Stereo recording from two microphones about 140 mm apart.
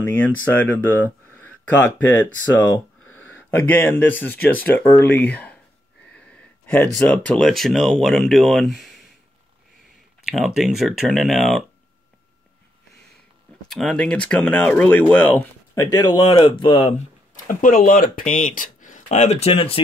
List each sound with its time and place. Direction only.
0.0 s speech: 15° left (ahead or behind)
6.1 s a sound: 10° left (ahead or behind)
6.9 s speech: 5° left (ahead or behind)
10.2 s speech: centre (ahead or behind)
13.7 s speech: centre (ahead or behind); by 16.9 s 35° left (ahead or behind)
17.5 s speech: 75° left (ahead or behind); by 19.5 s 55° left (ahead or behind)
19.5 s speech: 40° left (ahead or behind)